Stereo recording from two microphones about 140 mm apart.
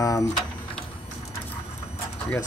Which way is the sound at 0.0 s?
25° left (ahead or behind).